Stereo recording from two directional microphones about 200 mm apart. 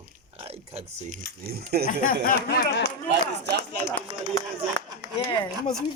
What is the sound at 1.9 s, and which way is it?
Speech, 40° left (ahead or behind).